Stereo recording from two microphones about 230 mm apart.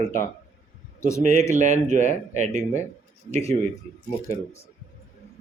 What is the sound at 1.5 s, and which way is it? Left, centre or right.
Speech, right.